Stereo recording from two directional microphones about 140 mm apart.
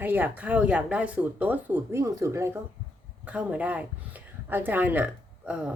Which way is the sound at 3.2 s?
10° right (ahead or behind).